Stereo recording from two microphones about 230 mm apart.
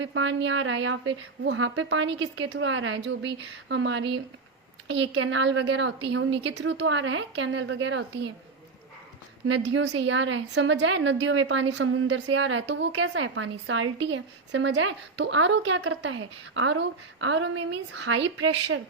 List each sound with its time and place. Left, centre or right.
0.0 s a woman's voice: right
9.5 s a woman's voice: right